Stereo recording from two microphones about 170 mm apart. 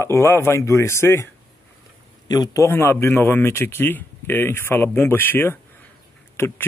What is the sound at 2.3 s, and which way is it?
Speech, 20° left (ahead or behind).